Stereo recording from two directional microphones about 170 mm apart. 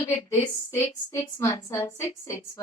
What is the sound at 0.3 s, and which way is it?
A woman's voice, 15° left (ahead or behind).